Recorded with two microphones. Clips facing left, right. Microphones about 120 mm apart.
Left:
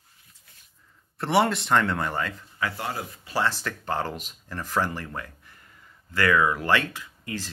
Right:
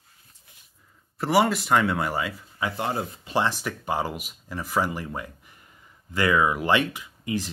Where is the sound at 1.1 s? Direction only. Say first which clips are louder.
Right 1 dB; 5° right (ahead or behind).